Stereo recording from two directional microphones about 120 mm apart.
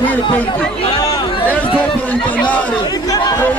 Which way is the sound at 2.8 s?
35° left (ahead or behind).